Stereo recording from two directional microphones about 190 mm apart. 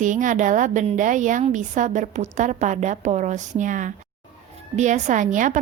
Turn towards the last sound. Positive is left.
turn(degrees=-45)  # may be behind; listen again after turning